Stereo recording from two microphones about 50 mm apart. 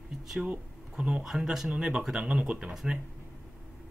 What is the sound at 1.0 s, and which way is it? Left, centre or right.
Speech, centre.